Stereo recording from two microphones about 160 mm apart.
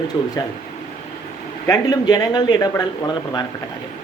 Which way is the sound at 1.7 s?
25° left (ahead or behind).